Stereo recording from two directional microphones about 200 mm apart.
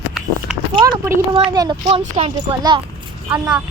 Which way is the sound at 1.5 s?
20° right (ahead or behind).